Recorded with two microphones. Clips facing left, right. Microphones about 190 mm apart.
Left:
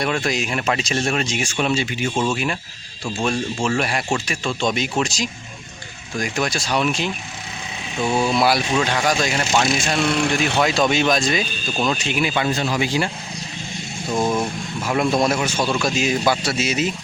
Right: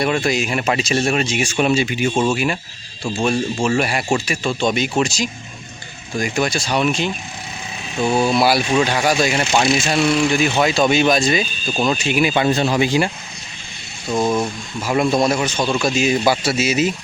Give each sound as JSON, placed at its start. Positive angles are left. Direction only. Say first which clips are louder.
{"t": 0.0, "sound": "speech", "louder": "right 3 dB", "side_deg": -5}
{"t": 8.1, "sound": "speech", "louder": "right 2 dB", "side_deg": -5}
{"t": 10.1, "sound": "speech", "louder": "right 4 dB", "side_deg": 60}
{"t": 10.3, "sound": "speech", "louder": "right 2 dB", "side_deg": 0}
{"t": 12.3, "sound": "speech", "louder": "right 4 dB", "side_deg": -25}
{"t": 14.1, "sound": "speech", "louder": "right 2 dB", "side_deg": 0}